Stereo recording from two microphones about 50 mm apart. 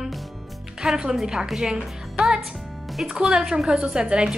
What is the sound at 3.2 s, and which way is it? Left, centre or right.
A woman's voice, centre.